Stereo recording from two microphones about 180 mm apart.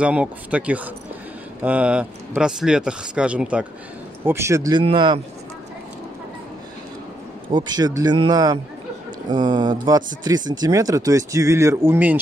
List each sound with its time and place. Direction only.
0.0 s speech: 5° right (ahead or behind); by 5.2 s 25° right (ahead or behind)
7.5 s speech: 25° right (ahead or behind)